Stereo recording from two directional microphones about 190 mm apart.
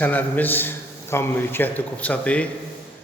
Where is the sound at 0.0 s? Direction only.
10° left (ahead or behind).